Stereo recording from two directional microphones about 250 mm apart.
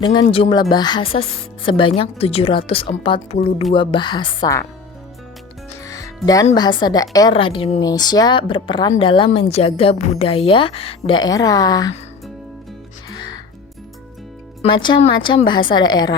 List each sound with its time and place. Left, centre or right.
0.0 s a woman's voice: centre
5.8 s music: centre
6.2 s a woman's voice: centre
13.1 s music: centre
14.6 s a woman's voice: centre